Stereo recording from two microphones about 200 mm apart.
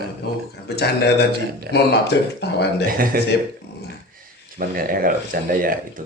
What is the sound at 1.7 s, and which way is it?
Speech, 55° left (ahead or behind).